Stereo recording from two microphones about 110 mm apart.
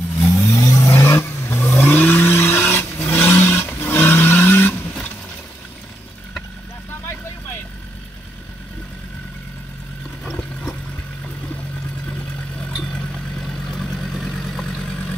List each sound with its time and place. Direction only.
0.2 s vehicle: 25° left (ahead or behind)
12.9 s vehicle: 10° left (ahead or behind)